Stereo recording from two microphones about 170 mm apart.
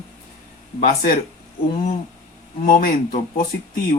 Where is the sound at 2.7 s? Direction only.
55° left (ahead or behind).